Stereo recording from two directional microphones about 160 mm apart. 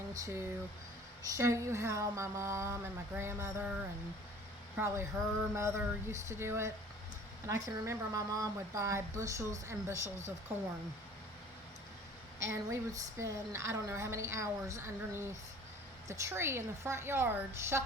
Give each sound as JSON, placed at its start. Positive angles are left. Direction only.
{"t": 0.1, "sound": "a woman's voice", "side_deg": -20}
{"t": 4.8, "sound": "a woman's voice", "side_deg": -15}
{"t": 12.5, "sound": "a woman's voice", "side_deg": -20}